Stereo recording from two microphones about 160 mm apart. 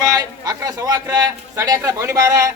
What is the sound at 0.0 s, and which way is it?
A man's voice, 20° right (ahead or behind).